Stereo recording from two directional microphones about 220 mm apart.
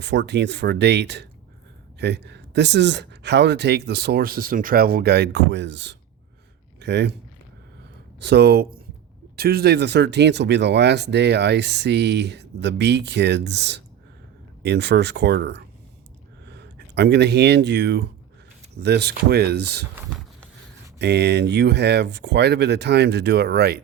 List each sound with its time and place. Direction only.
0.0 s speech: 50° right (ahead or behind)
8.2 s speech: 50° right (ahead or behind)
21.0 s speech: 50° right (ahead or behind)